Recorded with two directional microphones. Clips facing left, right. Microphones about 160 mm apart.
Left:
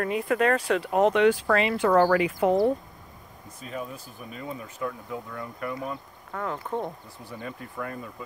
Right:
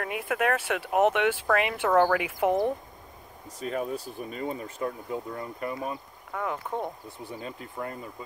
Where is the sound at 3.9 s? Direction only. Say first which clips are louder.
Right 6 dB; 35° right (ahead or behind).